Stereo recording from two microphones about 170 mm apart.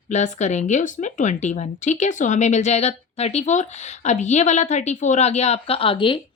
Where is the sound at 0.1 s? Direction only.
45° left (ahead or behind).